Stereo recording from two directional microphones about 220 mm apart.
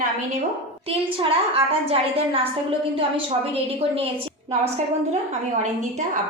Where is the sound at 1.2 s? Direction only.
25° right (ahead or behind).